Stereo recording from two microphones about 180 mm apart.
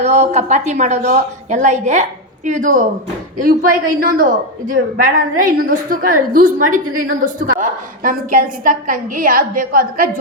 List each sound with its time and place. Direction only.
0.0 s a woman's voice: 35° right (ahead or behind)